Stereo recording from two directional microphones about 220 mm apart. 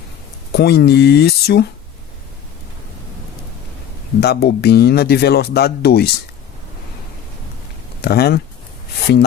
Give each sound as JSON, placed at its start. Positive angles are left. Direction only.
{"t": 0.5, "sound": "speech", "side_deg": 45}
{"t": 4.2, "sound": "speech", "side_deg": 45}
{"t": 8.0, "sound": "speech", "side_deg": 45}